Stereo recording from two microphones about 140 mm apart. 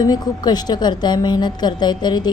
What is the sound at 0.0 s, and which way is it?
A woman's voice, 30° left (ahead or behind).